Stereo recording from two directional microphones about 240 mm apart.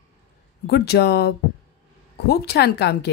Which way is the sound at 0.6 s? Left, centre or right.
Left.